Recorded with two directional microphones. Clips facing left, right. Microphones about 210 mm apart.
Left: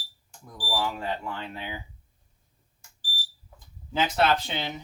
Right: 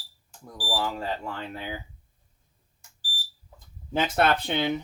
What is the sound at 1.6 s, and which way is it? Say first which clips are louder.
Speech: right 2 dB; 40° right (ahead or behind).